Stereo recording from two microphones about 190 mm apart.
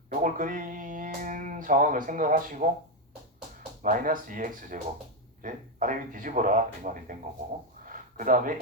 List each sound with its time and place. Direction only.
0.1 s speech: 45° right (ahead or behind)
3.8 s speech: 45° right (ahead or behind)
7.9 s a sound: 45° right (ahead or behind)